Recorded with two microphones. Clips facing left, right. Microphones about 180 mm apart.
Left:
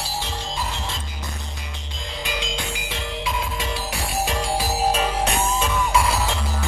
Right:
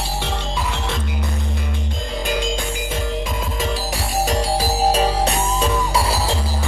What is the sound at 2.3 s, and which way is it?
Music, 45° right (ahead or behind).